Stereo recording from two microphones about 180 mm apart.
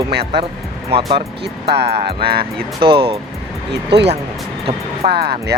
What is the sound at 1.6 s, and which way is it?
Speech, 65° right (ahead or behind).